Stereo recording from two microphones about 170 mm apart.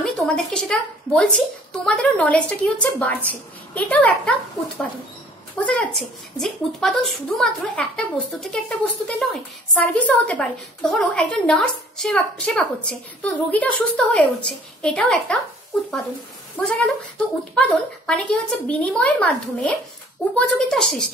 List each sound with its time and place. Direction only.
0.0 s a woman's voice: 5° left (ahead or behind)
5.6 s a woman's voice: 5° left (ahead or behind)
16.5 s a woman's voice: 5° left (ahead or behind)